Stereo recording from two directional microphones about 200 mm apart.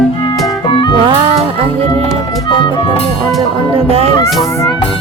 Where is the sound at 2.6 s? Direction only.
25° left (ahead or behind).